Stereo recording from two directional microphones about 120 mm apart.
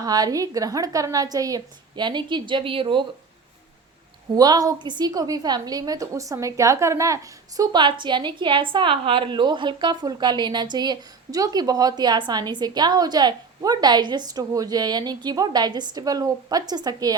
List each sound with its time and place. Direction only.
0.0 s a woman's voice: 35° right (ahead or behind)
4.4 s a woman's voice: 30° right (ahead or behind)